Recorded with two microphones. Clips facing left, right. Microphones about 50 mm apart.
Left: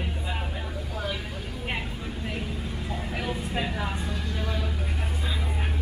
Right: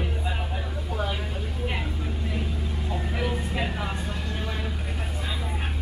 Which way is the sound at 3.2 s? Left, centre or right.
Right.